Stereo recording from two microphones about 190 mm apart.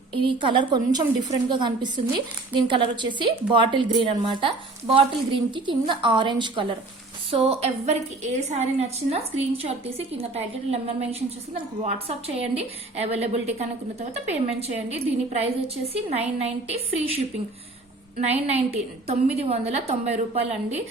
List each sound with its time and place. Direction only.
0.1 s a woman's voice: 25° right (ahead or behind)
18.4 s a woman's voice: 35° right (ahead or behind)